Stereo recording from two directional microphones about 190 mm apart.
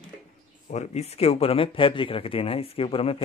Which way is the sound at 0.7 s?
35° left (ahead or behind).